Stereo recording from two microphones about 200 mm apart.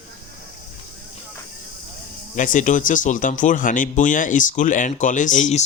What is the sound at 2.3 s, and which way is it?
Speech, 40° left (ahead or behind).